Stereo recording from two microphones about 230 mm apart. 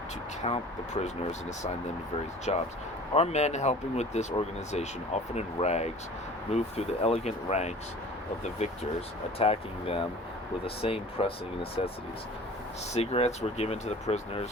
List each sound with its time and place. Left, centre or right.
0.4 s speech: left
9.4 s speech: left
12.9 s speech: left